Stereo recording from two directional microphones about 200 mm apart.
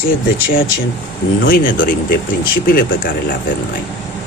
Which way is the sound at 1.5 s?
45° left (ahead or behind).